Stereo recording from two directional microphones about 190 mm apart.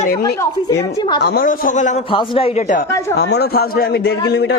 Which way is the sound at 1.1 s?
55° left (ahead or behind).